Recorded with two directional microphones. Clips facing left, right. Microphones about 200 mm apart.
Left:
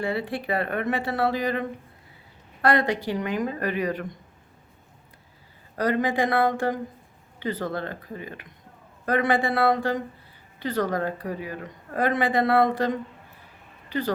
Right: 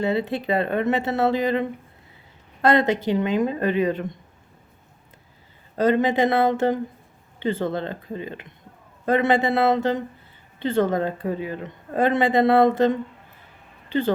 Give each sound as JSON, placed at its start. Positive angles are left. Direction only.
{"t": 0.0, "sound": "a woman's voice", "side_deg": -20}
{"t": 5.7, "sound": "a woman's voice", "side_deg": -25}